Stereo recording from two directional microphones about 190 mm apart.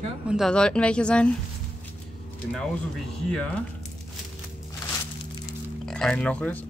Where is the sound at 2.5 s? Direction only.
5° left (ahead or behind).